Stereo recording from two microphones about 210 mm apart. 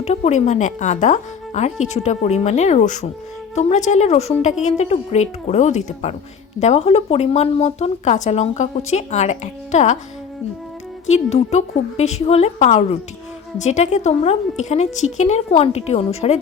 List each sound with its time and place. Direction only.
0.0 s speech: 30° left (ahead or behind)
11.0 s speech: 30° left (ahead or behind)